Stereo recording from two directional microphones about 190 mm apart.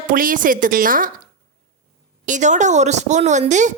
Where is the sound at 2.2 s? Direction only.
40° right (ahead or behind).